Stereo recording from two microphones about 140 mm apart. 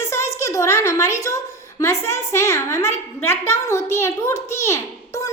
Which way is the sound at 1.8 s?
20° left (ahead or behind).